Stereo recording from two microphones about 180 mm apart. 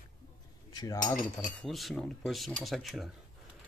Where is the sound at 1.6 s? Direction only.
Centre (ahead or behind).